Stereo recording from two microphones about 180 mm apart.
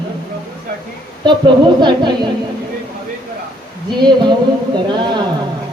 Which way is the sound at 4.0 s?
25° right (ahead or behind).